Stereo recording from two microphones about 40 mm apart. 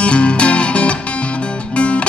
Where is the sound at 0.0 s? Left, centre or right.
Left.